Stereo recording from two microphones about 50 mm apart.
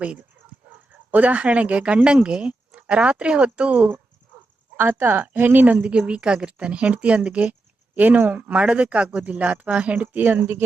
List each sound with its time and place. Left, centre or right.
0.0 s speech: right
4.8 s speech: right
10.0 s speech: right